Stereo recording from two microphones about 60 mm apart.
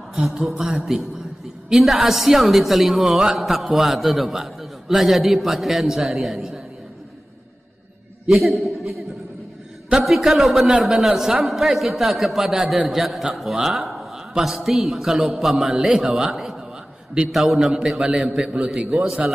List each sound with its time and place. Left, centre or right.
0.1 s a woman's voice: centre
8.3 s a woman's voice: centre
10.0 s a woman's voice: centre
18.9 s a woman's voice: centre